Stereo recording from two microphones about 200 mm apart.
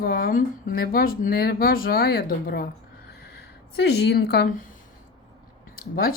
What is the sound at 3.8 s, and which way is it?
Speech, 50° left (ahead or behind).